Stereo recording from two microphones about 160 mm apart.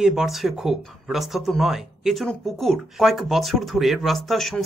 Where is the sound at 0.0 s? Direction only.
Centre (ahead or behind).